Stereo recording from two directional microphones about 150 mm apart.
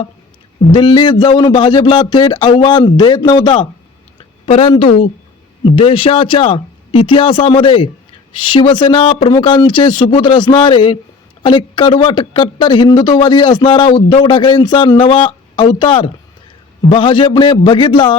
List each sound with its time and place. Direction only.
0.7 s speech: 30° left (ahead or behind)